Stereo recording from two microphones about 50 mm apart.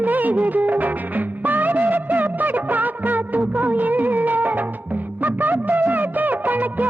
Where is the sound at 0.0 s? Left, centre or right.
Right.